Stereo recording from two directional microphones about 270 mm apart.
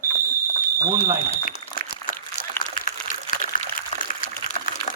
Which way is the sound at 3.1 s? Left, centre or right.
Left.